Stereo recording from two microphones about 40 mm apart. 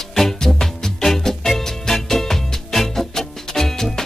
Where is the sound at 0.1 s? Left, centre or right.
Centre.